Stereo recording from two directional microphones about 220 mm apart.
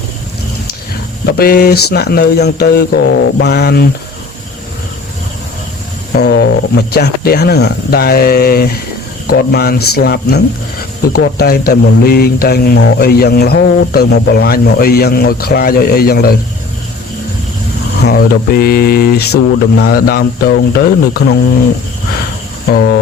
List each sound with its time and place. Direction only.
1.2 s speech: 45° left (ahead or behind)
6.1 s speech: 50° left (ahead or behind)
18.0 s speech: 45° left (ahead or behind)